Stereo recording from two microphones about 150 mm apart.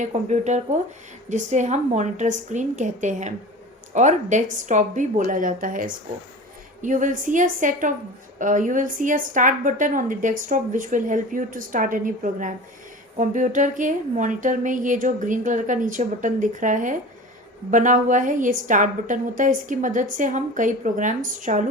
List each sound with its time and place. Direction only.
0.0 s a woman's voice: 50° right (ahead or behind)